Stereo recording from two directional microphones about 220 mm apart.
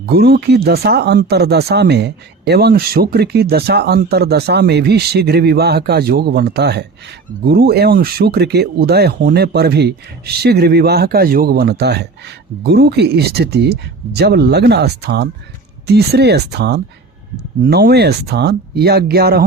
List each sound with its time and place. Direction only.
0.0 s speech: 45° right (ahead or behind)